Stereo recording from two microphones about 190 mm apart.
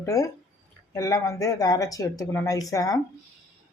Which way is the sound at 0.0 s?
15° left (ahead or behind).